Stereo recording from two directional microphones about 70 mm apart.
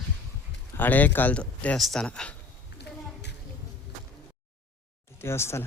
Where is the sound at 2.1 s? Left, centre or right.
Centre.